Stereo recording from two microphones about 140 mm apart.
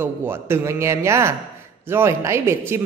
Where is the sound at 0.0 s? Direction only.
15° right (ahead or behind).